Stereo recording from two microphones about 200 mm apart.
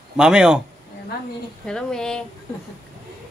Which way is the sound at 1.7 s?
5° left (ahead or behind).